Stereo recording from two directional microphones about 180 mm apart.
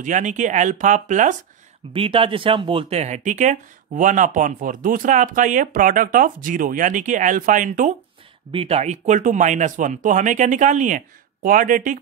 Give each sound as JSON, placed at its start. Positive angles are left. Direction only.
{"t": 0.0, "sound": "speech", "side_deg": -45}
{"t": 1.9, "sound": "speech", "side_deg": -30}
{"t": 8.5, "sound": "speech", "side_deg": -35}